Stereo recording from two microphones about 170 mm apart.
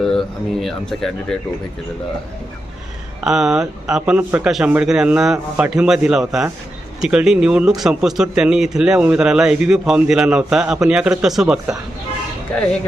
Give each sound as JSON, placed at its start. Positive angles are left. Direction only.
{"t": 0.0, "sound": "speech", "side_deg": 0}
{"t": 3.2, "sound": "speech", "side_deg": -5}